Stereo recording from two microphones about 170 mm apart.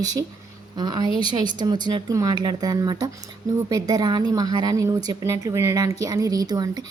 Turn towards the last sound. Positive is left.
turn(degrees=-25)  # may be behind; listen again after turning